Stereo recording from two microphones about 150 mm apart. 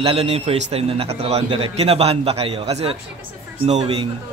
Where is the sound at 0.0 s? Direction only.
40° right (ahead or behind).